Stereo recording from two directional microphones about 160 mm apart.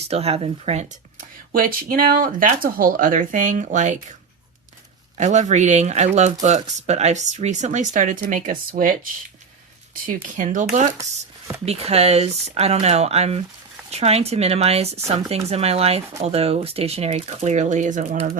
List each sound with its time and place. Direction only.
0.0 s speech: 40° right (ahead or behind)
1.5 s speech: 60° right (ahead or behind)
5.1 s speech: 50° right (ahead or behind)
10.1 s speech: 55° right (ahead or behind)
11.6 s speech: 40° right (ahead or behind)